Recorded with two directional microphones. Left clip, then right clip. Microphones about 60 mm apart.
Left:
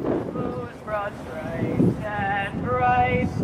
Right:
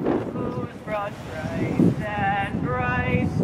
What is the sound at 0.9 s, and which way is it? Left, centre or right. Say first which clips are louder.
Boat: left 1 dB; centre.